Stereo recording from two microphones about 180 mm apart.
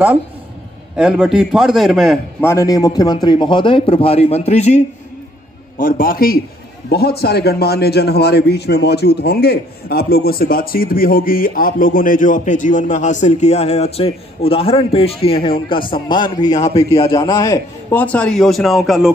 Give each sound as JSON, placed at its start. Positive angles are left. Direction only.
{"t": 0.9, "sound": "a man's voice", "side_deg": -5}
{"t": 2.4, "sound": "a man's voice", "side_deg": 15}
{"t": 5.8, "sound": "a man's voice", "side_deg": 50}
{"t": 18.0, "sound": "a man's voice", "side_deg": 5}